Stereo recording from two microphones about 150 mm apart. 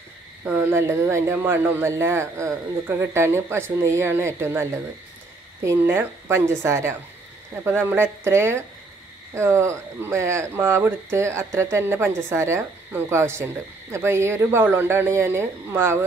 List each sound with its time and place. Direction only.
0.5 s speech: 15° right (ahead or behind)